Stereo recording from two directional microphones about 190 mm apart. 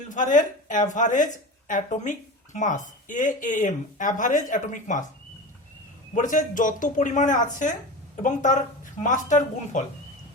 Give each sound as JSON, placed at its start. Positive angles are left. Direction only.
{"t": 0.1, "sound": "a woman's voice", "side_deg": 40}
{"t": 6.1, "sound": "speech", "side_deg": 45}